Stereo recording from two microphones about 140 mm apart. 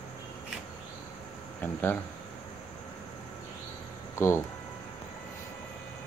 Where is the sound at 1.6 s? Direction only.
15° left (ahead or behind).